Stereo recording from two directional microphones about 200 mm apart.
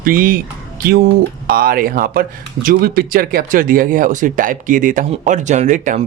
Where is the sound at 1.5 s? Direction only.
45° right (ahead or behind).